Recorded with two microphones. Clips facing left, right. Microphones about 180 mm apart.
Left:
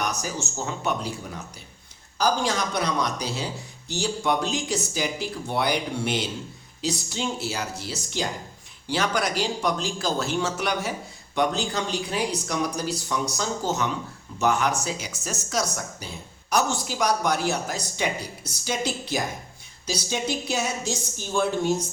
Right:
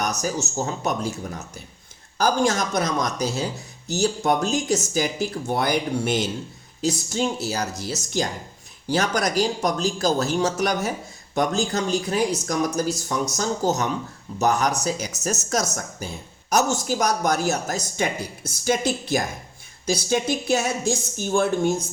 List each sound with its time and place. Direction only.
0.0 s a woman's voice: 40° right (ahead or behind)